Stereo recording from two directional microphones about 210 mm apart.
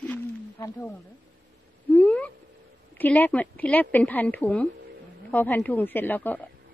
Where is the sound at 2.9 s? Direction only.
10° left (ahead or behind).